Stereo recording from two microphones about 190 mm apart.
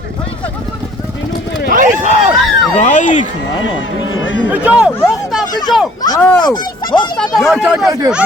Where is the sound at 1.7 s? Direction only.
45° right (ahead or behind).